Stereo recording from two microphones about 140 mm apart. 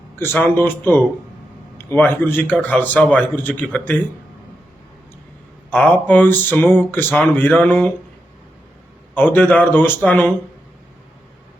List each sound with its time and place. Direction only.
0.2 s a man's voice: 15° left (ahead or behind)
5.7 s a man's voice: 10° left (ahead or behind)
9.1 s a man's voice: 15° left (ahead or behind)